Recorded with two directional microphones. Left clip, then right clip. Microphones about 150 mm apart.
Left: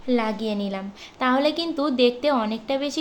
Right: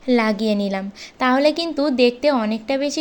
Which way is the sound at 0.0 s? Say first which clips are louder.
Right 5 dB; 35° right (ahead or behind).